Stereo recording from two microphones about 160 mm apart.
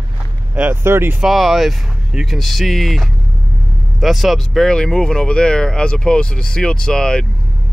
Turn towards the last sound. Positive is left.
turn(degrees=5)  # may be behind; listen again after turning